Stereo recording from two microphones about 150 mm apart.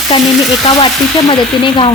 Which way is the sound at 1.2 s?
35° left (ahead or behind).